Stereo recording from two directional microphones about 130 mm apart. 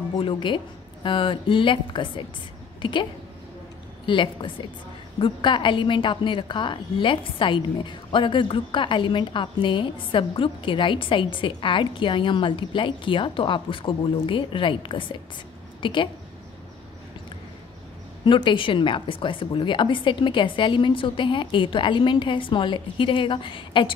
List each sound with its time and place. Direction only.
0.2 s a woman's voice: 40° left (ahead or behind)
18.2 s a woman's voice: 40° left (ahead or behind)